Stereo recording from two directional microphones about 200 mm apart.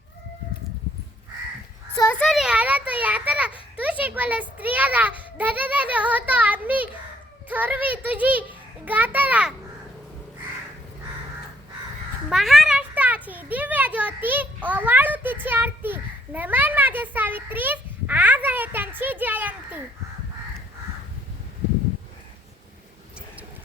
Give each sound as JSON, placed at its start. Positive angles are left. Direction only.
{"t": 2.0, "sound": "a child's voice", "side_deg": 10}
{"t": 12.3, "sound": "a child's voice", "side_deg": 0}